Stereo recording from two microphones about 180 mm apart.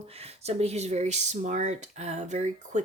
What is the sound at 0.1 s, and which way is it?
Speech, 35° right (ahead or behind).